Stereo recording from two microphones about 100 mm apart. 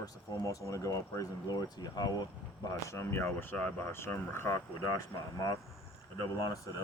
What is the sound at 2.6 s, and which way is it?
Speech, 25° left (ahead or behind).